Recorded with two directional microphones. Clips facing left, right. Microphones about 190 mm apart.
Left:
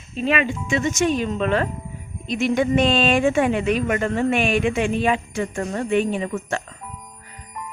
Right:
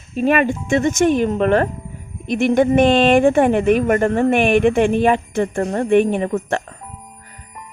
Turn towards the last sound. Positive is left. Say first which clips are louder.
# right 6 dB
turn(degrees=-55)  # may be behind; listen again after turning